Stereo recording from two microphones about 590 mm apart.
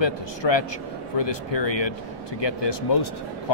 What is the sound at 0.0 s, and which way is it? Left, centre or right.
A man's voice, left.